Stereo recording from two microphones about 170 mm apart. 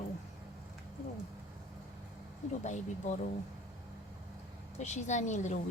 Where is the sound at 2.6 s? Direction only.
45° left (ahead or behind).